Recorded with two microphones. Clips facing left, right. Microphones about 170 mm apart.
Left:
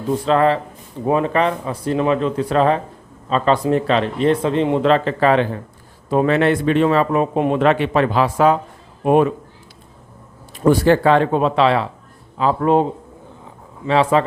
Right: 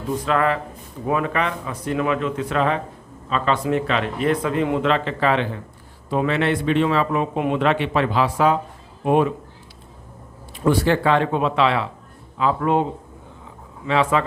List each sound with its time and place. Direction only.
0.1 s a man's voice: 30° left (ahead or behind); by 9.3 s 50° left (ahead or behind)
10.6 s speech: 40° left (ahead or behind)
13.8 s speech: 35° left (ahead or behind)